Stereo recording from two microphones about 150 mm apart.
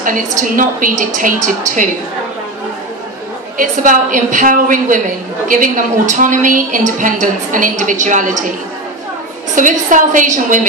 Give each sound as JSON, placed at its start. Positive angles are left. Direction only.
{"t": 0.4, "sound": "a woman's voice", "side_deg": -65}
{"t": 3.5, "sound": "a woman's voice", "side_deg": -60}
{"t": 9.6, "sound": "a woman's voice", "side_deg": -60}